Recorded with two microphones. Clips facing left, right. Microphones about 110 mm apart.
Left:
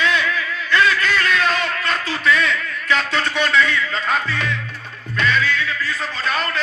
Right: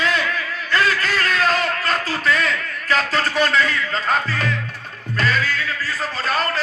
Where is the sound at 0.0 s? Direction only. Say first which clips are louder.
Left 1 dB; 40° right (ahead or behind).